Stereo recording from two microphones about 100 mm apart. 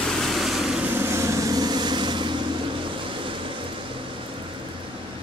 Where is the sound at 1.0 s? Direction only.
30° right (ahead or behind); by 2.3 s 50° right (ahead or behind).